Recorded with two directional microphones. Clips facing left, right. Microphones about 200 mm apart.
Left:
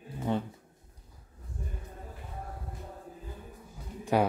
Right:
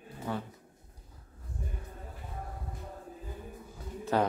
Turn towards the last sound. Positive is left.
turn(degrees=15)  # may be behind; listen again after turning